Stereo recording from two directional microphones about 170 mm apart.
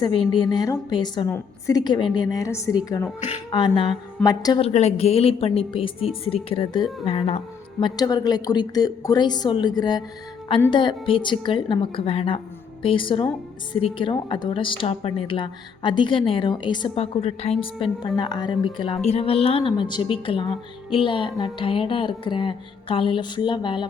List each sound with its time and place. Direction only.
0.0 s speech: 30° left (ahead or behind)
4.6 s speech: 40° left (ahead or behind)
18.0 s speech: 25° left (ahead or behind)